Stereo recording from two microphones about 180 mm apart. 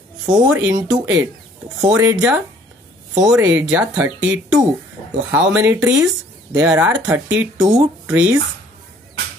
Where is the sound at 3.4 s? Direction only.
10° right (ahead or behind).